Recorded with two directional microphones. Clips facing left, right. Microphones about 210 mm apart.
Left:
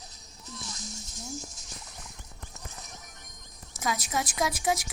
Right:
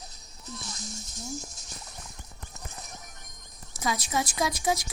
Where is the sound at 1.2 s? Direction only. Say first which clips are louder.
Right 2 dB; 20° right (ahead or behind).